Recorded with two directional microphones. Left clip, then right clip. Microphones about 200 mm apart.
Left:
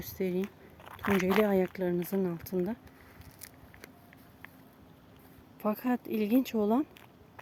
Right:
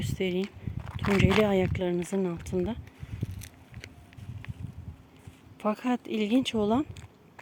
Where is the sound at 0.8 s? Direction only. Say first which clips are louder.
Right 3 dB; 15° right (ahead or behind).